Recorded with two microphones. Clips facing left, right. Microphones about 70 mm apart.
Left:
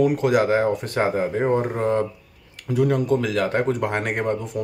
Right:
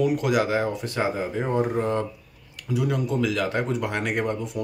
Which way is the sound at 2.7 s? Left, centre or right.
Left.